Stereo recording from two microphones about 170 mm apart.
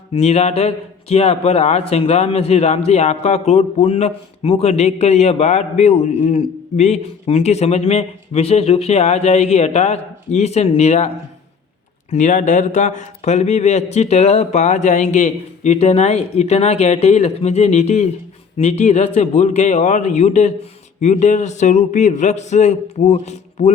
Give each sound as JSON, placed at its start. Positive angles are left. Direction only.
{"t": 0.1, "sound": "a man's voice", "side_deg": 40}
{"t": 12.1, "sound": "a man's voice", "side_deg": 45}